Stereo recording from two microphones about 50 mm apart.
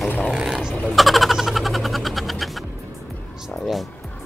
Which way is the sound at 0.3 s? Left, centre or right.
Centre.